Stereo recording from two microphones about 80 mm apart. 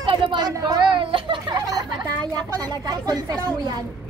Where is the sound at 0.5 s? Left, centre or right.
Right.